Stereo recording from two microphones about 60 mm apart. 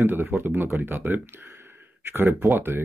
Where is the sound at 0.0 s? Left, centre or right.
Right.